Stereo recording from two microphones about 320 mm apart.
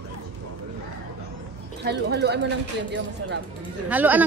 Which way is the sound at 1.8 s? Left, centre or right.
Right.